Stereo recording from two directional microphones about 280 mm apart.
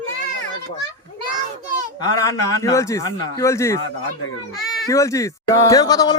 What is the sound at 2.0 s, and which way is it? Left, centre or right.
Speech, centre.